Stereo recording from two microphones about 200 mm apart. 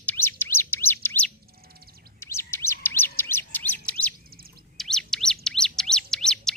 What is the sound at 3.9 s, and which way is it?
Bird, 5° left (ahead or behind).